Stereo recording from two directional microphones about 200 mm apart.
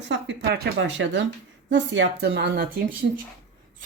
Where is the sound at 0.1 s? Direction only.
55° right (ahead or behind).